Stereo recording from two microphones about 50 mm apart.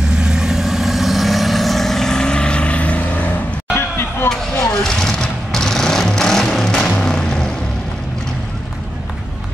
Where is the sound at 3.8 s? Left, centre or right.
Left.